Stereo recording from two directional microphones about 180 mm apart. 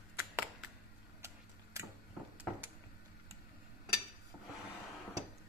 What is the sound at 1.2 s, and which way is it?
Tick-tock, 15° right (ahead or behind).